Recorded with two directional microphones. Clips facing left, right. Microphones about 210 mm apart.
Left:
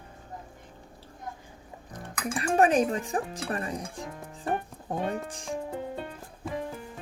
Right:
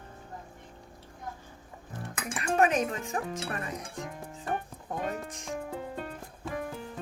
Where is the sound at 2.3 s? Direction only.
35° left (ahead or behind).